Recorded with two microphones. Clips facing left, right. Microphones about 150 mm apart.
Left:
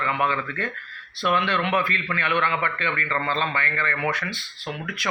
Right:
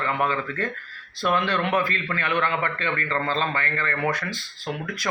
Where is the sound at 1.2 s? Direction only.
40° right (ahead or behind).